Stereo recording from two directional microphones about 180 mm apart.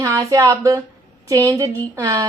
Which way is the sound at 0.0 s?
15° right (ahead or behind).